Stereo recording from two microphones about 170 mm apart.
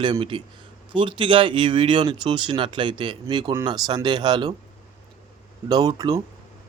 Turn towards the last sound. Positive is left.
turn(degrees=-20)  # may be behind; listen again after turning